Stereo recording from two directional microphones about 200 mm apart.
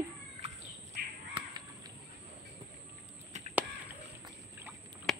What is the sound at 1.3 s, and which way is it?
Crow, 20° right (ahead or behind).